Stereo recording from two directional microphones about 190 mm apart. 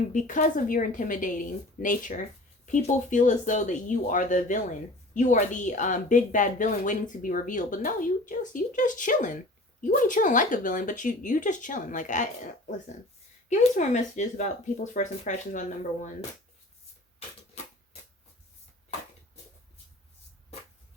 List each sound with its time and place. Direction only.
0.1 s a woman's voice: 40° left (ahead or behind)